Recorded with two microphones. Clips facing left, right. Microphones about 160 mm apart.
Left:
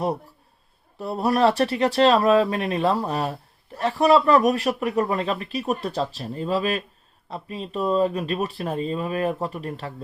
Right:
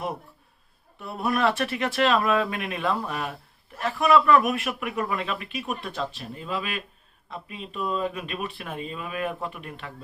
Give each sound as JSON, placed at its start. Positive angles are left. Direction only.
{"t": 0.9, "sound": "speech", "side_deg": 35}